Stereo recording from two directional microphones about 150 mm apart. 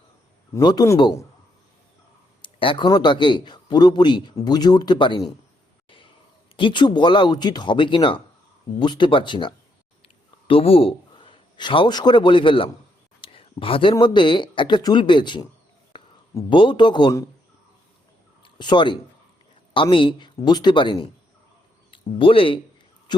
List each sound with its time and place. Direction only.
0.5 s speech: 25° left (ahead or behind)
2.4 s a man's voice: 35° left (ahead or behind)
6.6 s a man's voice: 30° left (ahead or behind)
13.2 s a sound: 35° left (ahead or behind)
13.9 s a man's voice: 30° left (ahead or behind)
16.5 s a man's voice: 30° left (ahead or behind)
18.4 s a man's voice: 30° left (ahead or behind)